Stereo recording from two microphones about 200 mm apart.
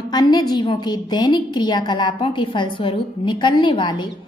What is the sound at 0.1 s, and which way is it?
A woman's voice, 20° left (ahead or behind).